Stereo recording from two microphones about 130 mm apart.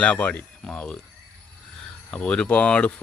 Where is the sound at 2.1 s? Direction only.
5° left (ahead or behind).